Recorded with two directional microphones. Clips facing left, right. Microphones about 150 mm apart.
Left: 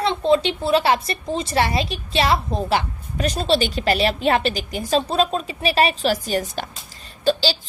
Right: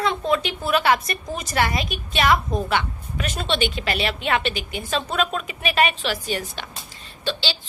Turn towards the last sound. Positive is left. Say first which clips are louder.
# left 7 dB
turn(degrees=40)  # may be behind; listen again after turning